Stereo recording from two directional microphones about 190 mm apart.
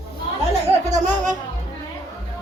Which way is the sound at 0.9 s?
40° right (ahead or behind).